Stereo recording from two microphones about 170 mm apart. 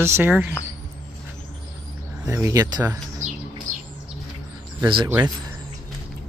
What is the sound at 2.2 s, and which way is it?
Speech, 15° right (ahead or behind).